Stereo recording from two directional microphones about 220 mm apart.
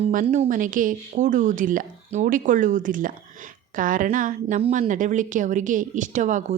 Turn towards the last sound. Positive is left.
turn(degrees=-35)  # may be behind; listen again after turning